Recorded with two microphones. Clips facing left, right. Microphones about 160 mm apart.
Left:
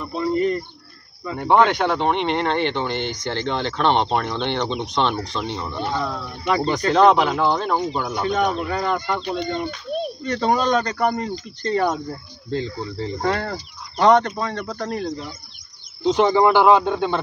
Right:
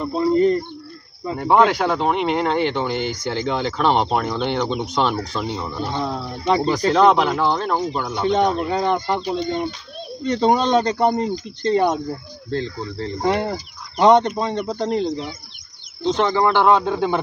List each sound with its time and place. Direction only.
0.0 s speech: 30° right (ahead or behind)
1.3 s speech: 5° right (ahead or behind)
5.9 s speech: 25° right (ahead or behind)
6.9 s speech: centre (ahead or behind)
8.3 s speech: 25° right (ahead or behind)
10.2 s speech: 20° right (ahead or behind)
12.4 s speech: 5° left (ahead or behind)
13.2 s speech: 20° right (ahead or behind)
16.0 s speech: 15° left (ahead or behind); by 17.1 s centre (ahead or behind)